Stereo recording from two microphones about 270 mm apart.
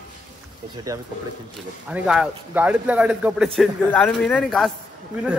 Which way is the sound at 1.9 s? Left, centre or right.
Centre.